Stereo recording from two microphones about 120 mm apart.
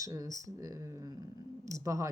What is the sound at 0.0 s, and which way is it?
Speech, 30° right (ahead or behind).